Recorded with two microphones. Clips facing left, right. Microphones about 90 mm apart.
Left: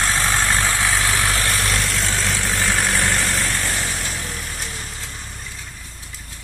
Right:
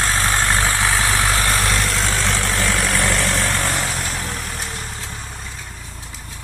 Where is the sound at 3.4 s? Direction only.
65° right (ahead or behind).